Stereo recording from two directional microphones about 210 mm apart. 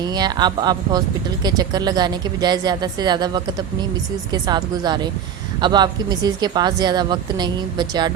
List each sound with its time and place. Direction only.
0.0 s speech: 20° right (ahead or behind)